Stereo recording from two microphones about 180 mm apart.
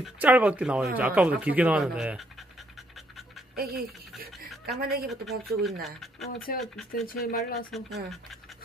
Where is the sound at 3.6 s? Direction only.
60° right (ahead or behind).